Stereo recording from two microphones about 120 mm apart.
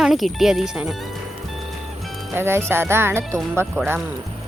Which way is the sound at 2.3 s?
20° right (ahead or behind).